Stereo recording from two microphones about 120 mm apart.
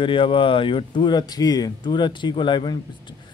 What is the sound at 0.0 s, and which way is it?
Speech, 45° left (ahead or behind).